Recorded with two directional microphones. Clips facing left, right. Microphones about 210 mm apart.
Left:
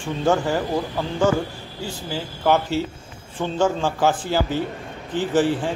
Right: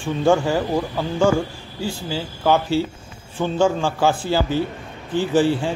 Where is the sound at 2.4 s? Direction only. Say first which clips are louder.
Right 1 dB; 10° right (ahead or behind).